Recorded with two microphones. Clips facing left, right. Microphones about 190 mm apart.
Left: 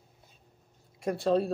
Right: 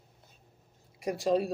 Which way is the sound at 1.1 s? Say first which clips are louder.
Left 1 dB; 10° right (ahead or behind).